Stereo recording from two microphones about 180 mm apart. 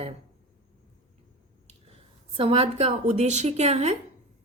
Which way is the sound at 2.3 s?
35° right (ahead or behind).